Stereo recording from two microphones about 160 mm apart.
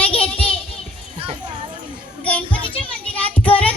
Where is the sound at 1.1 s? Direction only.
35° right (ahead or behind).